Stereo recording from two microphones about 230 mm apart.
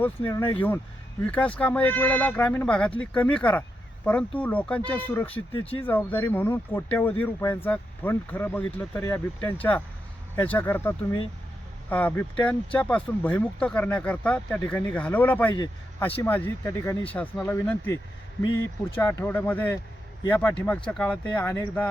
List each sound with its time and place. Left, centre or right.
0.0 s speech: centre
5.5 s speech: left
5.8 s speech: centre